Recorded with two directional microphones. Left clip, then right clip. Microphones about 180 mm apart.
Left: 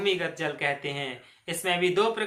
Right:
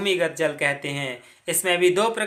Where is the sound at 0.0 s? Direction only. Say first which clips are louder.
Right 5 dB; 40° right (ahead or behind).